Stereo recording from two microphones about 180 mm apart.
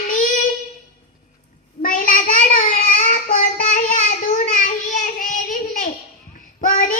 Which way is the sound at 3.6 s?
45° left (ahead or behind).